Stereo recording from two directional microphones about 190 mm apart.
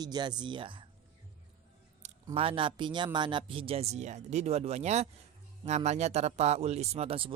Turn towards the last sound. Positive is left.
turn(degrees=-30)  # may be behind; listen again after turning